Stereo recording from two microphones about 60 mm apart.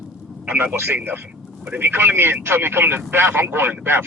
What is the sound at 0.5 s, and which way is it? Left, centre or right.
Speech, right.